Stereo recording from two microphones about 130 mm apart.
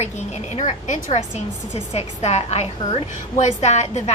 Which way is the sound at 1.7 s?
55° left (ahead or behind).